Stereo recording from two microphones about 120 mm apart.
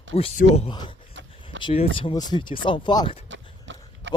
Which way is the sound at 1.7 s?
50° left (ahead or behind).